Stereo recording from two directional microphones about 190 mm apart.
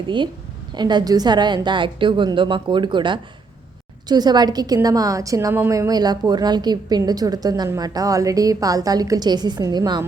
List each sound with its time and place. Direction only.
0.8 s a woman's voice: 20° right (ahead or behind)